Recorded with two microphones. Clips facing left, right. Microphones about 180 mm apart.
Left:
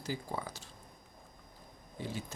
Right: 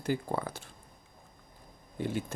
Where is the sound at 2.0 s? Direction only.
55° right (ahead or behind).